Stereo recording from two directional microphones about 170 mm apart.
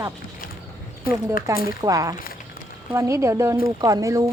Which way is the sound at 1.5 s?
20° right (ahead or behind).